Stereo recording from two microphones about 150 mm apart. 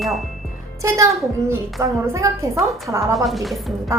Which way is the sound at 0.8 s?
20° right (ahead or behind).